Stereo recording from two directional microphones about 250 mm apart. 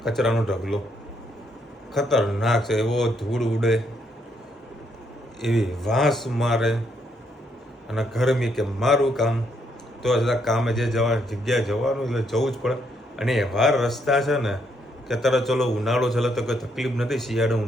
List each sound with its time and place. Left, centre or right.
0.0 s a man's voice: centre
1.9 s a man's voice: centre
5.4 s a man's voice: centre
7.9 s a man's voice: centre